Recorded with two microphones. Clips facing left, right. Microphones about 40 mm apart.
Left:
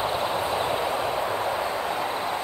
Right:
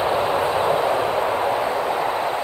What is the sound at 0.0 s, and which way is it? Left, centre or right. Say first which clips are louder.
Vehicle: right 6 dB; right.